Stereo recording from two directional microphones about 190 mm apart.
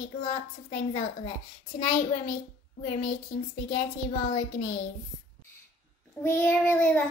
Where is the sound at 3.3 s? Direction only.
40° left (ahead or behind).